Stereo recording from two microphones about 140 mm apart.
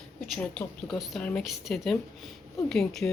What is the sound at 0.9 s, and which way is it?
A woman's voice, centre (ahead or behind).